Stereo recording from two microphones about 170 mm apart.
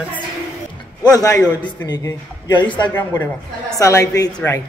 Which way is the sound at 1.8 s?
20° left (ahead or behind).